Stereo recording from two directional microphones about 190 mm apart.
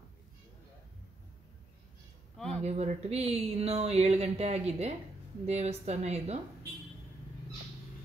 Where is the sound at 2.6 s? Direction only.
35° right (ahead or behind).